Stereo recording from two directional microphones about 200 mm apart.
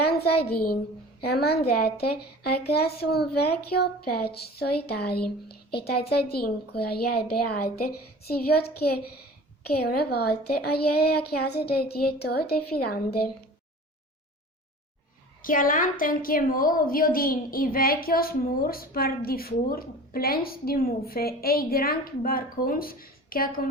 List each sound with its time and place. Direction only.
0.0 s a child's voice: 50° left (ahead or behind)
15.4 s a woman's voice: 45° left (ahead or behind)